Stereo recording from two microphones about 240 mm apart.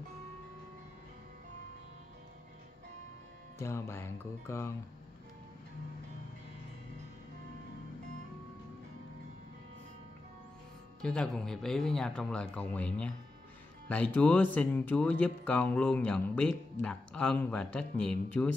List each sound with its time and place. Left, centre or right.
3.5 s speech: centre
11.0 s speech: centre